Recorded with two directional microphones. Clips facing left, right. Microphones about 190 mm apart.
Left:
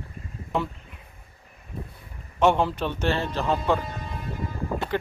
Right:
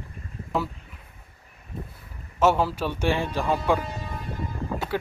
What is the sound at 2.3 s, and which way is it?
Speech, 5° right (ahead or behind).